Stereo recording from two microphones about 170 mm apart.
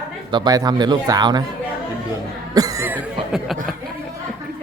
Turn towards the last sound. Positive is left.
turn(degrees=0)  # may be behind; listen again after turning